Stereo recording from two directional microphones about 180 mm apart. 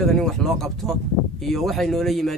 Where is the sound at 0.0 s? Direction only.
Centre (ahead or behind).